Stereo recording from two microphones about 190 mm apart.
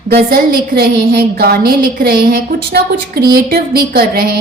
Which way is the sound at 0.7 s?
55° right (ahead or behind).